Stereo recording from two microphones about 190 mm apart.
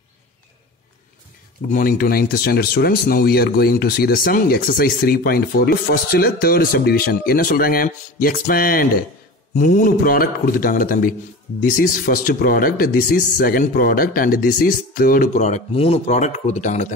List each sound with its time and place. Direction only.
1.7 s speech: 50° left (ahead or behind)